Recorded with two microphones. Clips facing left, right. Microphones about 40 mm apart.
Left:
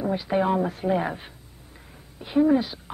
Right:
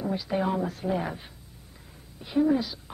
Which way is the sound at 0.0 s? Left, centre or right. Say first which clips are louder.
Left 4 dB; left.